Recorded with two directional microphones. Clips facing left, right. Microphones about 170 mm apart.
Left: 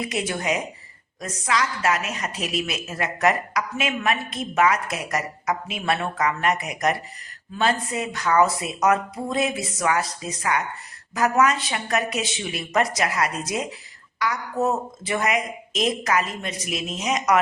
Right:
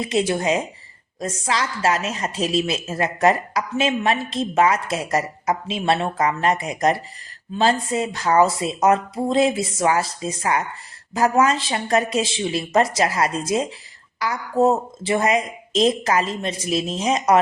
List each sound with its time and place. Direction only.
0.0 s a woman's voice: 25° right (ahead or behind)